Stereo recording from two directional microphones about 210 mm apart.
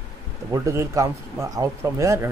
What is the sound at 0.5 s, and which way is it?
Speech, 15° right (ahead or behind).